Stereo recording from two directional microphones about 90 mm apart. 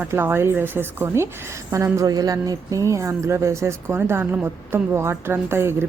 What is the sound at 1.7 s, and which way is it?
Speech, 35° right (ahead or behind).